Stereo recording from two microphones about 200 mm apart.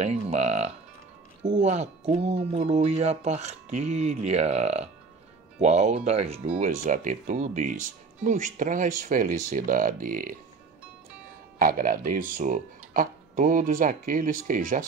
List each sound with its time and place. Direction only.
0.0 s speech: 35° right (ahead or behind)
6.6 s speech: 40° right (ahead or behind)
11.5 s speech: 45° right (ahead or behind)